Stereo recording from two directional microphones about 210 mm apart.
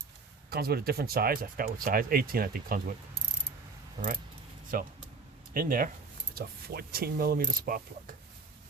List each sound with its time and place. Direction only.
0.5 s speech: 45° right (ahead or behind)
4.7 s speech: 40° right (ahead or behind)